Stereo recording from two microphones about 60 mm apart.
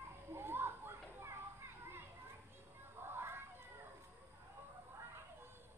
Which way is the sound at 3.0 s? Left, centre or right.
Right.